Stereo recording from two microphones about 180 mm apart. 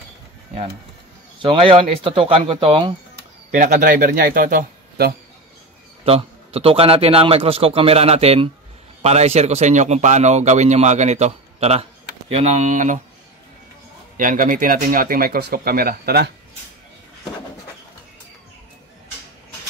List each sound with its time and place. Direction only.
1.4 s speech: 30° right (ahead or behind)
3.5 s speech: 45° right (ahead or behind)
6.0 s speech: 35° right (ahead or behind)
14.1 s speech: 50° right (ahead or behind)